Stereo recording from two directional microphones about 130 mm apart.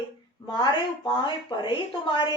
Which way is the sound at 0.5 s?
35° left (ahead or behind).